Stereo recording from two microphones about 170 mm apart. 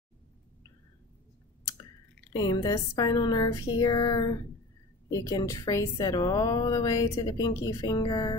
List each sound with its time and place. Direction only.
2.3 s a woman's voice: 20° left (ahead or behind)